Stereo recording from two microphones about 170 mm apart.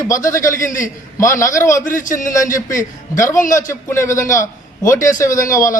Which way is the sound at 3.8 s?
15° left (ahead or behind).